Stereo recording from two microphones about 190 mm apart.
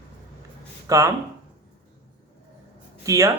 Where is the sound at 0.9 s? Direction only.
15° right (ahead or behind).